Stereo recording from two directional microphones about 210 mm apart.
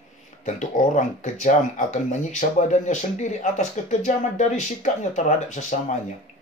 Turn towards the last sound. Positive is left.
turn(degrees=35)  # may be behind; listen again after turning